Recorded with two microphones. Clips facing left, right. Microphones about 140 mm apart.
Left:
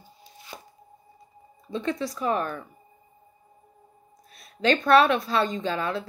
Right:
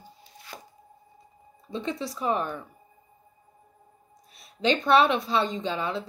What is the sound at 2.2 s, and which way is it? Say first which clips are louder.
Speech: even; 15° right (ahead or behind).